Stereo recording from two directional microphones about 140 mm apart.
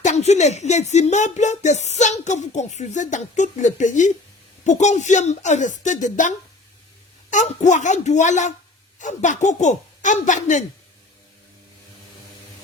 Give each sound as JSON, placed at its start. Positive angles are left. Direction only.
{"t": 0.0, "sound": "speech", "side_deg": 55}